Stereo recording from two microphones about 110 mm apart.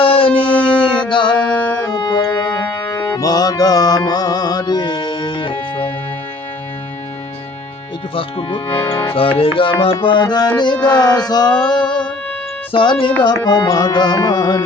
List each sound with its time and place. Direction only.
0.0 s music: 55° left (ahead or behind)
0.5 s a sound: 10° left (ahead or behind)
1.4 s music: 15° left (ahead or behind)
1.8 s music: 35° left (ahead or behind)
2.2 s music: 15° left (ahead or behind)
3.2 s music: 35° left (ahead or behind); by 5.9 s 55° left (ahead or behind)
8.1 s music: 50° left (ahead or behind)
8.7 s speech: 25° left (ahead or behind)
9.1 s music: 55° left (ahead or behind); by 10.8 s 40° left (ahead or behind)
10.8 s speech: 10° left (ahead or behind)
11.3 s music: 40° left (ahead or behind)
12.7 s music: 50° left (ahead or behind)
13.2 s music: 40° left (ahead or behind)